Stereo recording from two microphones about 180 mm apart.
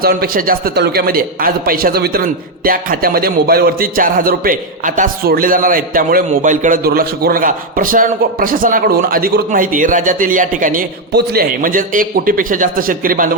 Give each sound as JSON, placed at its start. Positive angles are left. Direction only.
{"t": 0.0, "sound": "a man's voice", "side_deg": -55}
{"t": 11.1, "sound": "a man's voice", "side_deg": -60}